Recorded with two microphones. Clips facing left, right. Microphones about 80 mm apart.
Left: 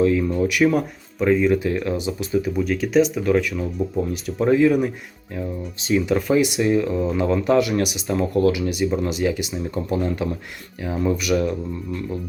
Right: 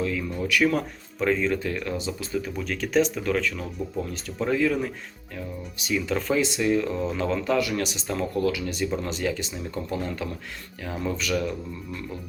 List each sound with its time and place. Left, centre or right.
0.0 s speech: left
0.4 s speech: centre
2.5 s speech: centre
5.4 s speech: left
6.1 s speech: centre
6.8 s speech: centre